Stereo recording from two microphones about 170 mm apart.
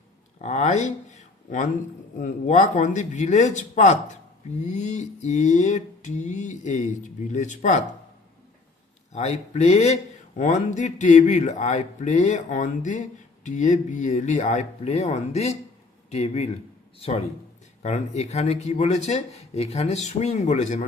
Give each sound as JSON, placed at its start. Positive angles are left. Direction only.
{"t": 0.4, "sound": "a man's voice", "side_deg": 40}
{"t": 9.1, "sound": "a man's voice", "side_deg": 40}
{"t": 17.8, "sound": "speech", "side_deg": 40}